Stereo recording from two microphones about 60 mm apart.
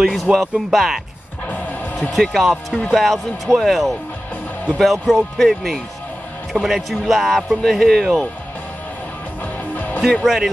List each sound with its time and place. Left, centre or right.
0.0 s speech: centre
9.8 s music: left
10.2 s speech: centre